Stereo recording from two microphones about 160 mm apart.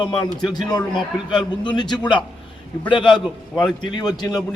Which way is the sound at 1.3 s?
30° left (ahead or behind).